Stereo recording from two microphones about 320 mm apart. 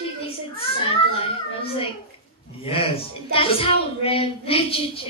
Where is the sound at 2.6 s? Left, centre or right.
Centre.